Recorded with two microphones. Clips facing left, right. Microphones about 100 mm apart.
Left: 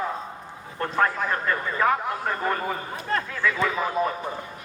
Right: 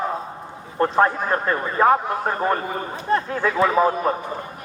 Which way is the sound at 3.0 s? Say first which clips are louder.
Right 7 dB; 25° right (ahead or behind).